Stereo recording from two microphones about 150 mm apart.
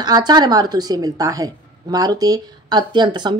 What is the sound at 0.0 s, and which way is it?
Speech, 25° right (ahead or behind).